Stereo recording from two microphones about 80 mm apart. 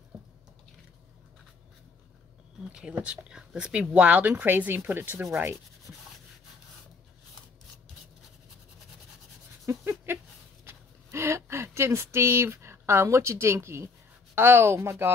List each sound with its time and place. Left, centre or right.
2.7 s speech: centre; by 5.6 s right
9.7 s a sound: right
10.6 s speech: right